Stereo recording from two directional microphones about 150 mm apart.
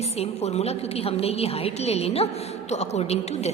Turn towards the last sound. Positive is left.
turn(degrees=45)  # may be behind; listen again after turning